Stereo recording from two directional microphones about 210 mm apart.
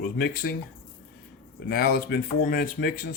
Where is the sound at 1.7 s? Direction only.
45° left (ahead or behind).